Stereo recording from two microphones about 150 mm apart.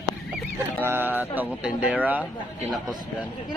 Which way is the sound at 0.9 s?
15° right (ahead or behind).